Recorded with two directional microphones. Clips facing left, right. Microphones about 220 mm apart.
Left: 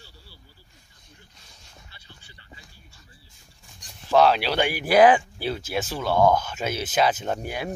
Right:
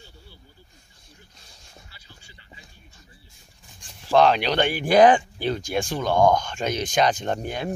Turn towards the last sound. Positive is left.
turn(degrees=10)  # may be behind; listen again after turning